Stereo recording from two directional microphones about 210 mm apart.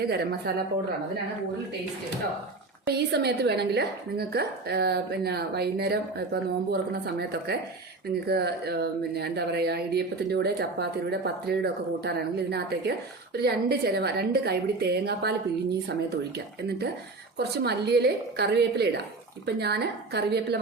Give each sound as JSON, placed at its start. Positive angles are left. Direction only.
{"t": 0.0, "sound": "a woman's voice", "side_deg": -45}
{"t": 2.8, "sound": "a woman's voice", "side_deg": -50}
{"t": 17.3, "sound": "a woman's voice", "side_deg": -50}